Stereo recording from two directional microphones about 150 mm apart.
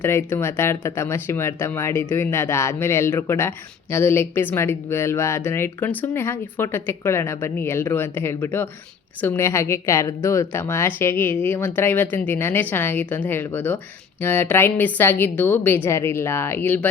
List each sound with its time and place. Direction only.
0.0 s speech: 15° left (ahead or behind)